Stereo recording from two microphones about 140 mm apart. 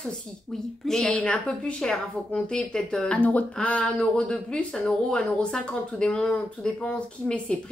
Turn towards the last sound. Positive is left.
turn(degrees=5)  # may be behind; listen again after turning